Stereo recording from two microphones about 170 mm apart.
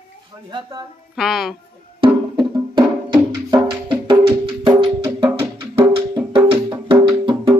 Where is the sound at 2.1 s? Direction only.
25° right (ahead or behind).